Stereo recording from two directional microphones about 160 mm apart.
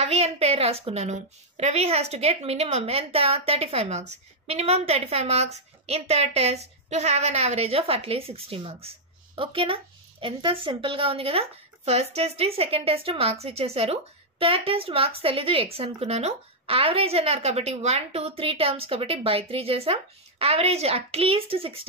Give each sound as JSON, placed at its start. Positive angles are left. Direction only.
{"t": 0.0, "sound": "a woman's voice", "side_deg": -40}